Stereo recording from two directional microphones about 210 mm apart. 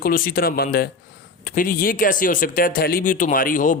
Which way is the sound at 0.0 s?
45° left (ahead or behind).